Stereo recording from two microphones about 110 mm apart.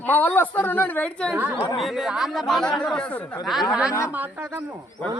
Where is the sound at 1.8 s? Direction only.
Centre (ahead or behind).